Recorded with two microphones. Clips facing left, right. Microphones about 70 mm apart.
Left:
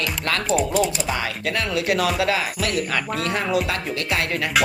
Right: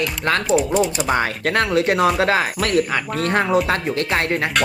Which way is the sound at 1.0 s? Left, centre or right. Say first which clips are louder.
Right 5 dB; right.